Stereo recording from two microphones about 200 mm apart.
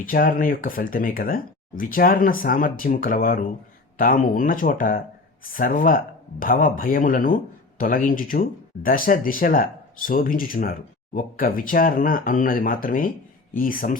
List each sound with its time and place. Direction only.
0.0 s speech: 45° left (ahead or behind)